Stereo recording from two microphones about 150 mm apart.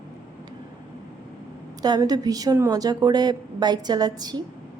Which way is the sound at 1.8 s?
25° right (ahead or behind).